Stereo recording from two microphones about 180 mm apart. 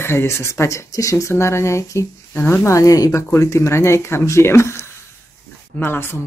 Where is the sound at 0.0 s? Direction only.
15° left (ahead or behind).